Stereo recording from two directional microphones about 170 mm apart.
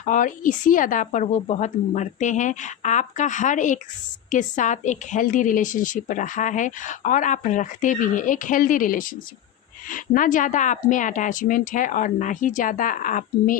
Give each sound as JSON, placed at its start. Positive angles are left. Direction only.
{"t": 0.0, "sound": "speech", "side_deg": 50}